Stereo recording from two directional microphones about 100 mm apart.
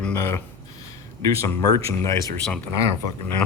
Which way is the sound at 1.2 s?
35° left (ahead or behind).